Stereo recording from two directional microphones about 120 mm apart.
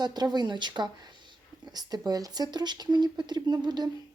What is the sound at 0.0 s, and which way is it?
Speech, 35° right (ahead or behind).